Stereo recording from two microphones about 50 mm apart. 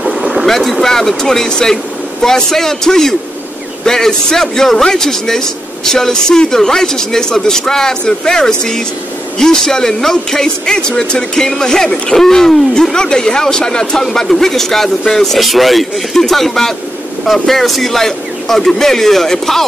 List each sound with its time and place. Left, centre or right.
0.2 s boat: centre
0.5 s a man's voice: centre
12.9 s a man's voice: centre